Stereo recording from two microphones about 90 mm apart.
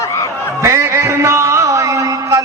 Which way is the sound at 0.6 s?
30° right (ahead or behind).